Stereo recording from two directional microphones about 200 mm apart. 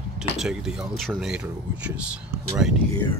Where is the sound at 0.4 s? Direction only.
5° right (ahead or behind).